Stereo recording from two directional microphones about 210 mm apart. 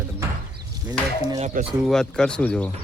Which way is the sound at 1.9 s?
5° left (ahead or behind).